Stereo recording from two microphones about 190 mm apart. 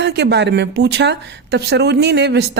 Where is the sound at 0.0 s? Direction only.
65° right (ahead or behind).